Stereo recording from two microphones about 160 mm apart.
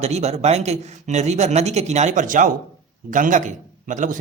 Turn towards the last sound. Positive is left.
turn(degrees=-50)  # may be behind; listen again after turning